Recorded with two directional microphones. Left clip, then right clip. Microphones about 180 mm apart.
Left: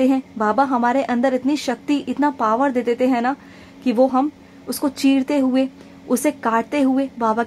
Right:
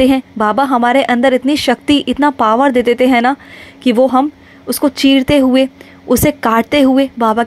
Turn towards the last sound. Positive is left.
turn(degrees=-25)  # may be behind; listen again after turning